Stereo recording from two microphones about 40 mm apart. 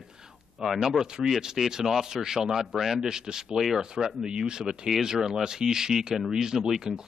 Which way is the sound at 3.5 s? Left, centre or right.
Centre.